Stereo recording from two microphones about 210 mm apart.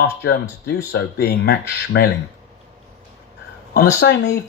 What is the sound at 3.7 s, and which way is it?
Speech, 50° left (ahead or behind).